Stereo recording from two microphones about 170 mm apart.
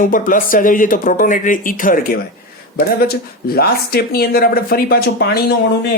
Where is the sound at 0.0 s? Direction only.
55° left (ahead or behind).